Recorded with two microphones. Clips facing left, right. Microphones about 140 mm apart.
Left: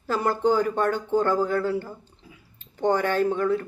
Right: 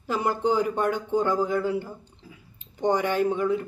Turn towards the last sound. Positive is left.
turn(degrees=-15)  # may be behind; listen again after turning